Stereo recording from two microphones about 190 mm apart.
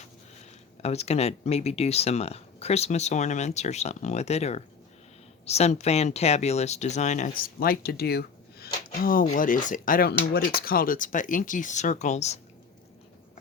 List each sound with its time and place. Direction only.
0.8 s speech: 35° left (ahead or behind)